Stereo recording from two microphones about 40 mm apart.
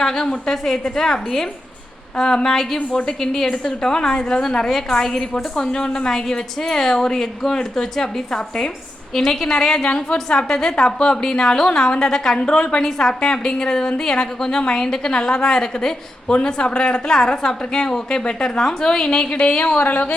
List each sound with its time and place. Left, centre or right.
0.0 s a woman's voice: centre
12.8 s a woman's voice: centre
17.1 s a woman's voice: centre; by 20.0 s left